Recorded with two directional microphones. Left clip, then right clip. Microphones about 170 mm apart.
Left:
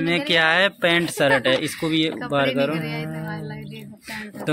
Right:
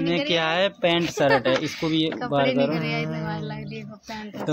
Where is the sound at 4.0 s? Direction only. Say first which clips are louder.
Left 6 dB; centre (ahead or behind).